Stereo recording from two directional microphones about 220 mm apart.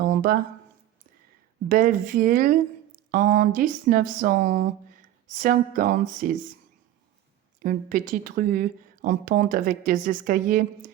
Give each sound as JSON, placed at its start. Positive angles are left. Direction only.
{"t": 0.1, "sound": "a sound", "side_deg": -40}
{"t": 1.6, "sound": "a woman's voice", "side_deg": -40}
{"t": 7.6, "sound": "a woman's voice", "side_deg": -40}